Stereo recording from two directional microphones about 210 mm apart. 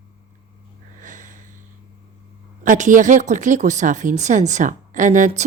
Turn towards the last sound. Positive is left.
turn(degrees=-35)  # may be behind; listen again after turning